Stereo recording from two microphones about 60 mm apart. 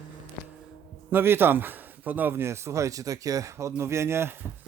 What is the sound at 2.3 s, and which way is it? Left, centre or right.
Speech, right.